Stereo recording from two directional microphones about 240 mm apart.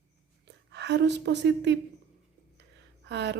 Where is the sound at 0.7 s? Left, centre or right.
Right.